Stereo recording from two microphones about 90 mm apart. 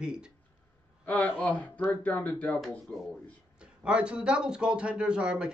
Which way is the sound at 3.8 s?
10° right (ahead or behind).